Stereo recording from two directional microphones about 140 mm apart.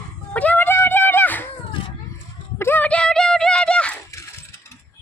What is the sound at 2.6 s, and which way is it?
Clip-clop, 15° left (ahead or behind).